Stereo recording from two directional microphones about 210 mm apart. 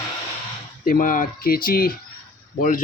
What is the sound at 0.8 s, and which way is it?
Speech, 40° left (ahead or behind).